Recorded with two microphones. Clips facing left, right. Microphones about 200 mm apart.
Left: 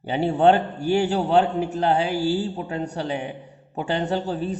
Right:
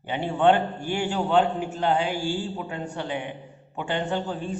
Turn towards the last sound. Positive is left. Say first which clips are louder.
# left 3 dB
turn(degrees=40)  # may be behind; listen again after turning